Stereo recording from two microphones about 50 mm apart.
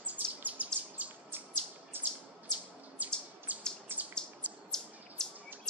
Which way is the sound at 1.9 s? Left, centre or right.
Right.